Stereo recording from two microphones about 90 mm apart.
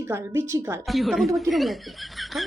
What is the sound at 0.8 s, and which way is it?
Speech, centre (ahead or behind).